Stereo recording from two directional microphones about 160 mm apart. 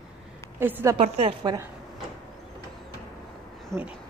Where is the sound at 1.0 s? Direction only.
35° right (ahead or behind).